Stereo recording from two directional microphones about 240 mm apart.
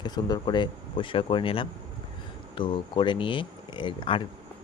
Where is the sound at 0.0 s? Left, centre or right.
Centre.